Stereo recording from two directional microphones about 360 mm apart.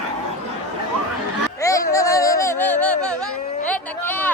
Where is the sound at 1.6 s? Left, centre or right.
Centre.